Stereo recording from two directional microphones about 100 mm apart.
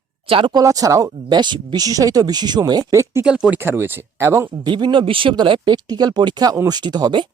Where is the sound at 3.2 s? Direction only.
10° right (ahead or behind).